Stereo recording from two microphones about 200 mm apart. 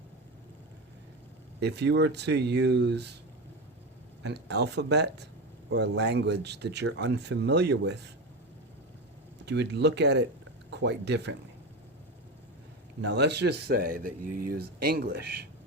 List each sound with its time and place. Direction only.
1.6 s speech: 60° right (ahead or behind)
4.2 s speech: 60° right (ahead or behind)
9.5 s speech: 60° right (ahead or behind)
13.0 s speech: 60° right (ahead or behind)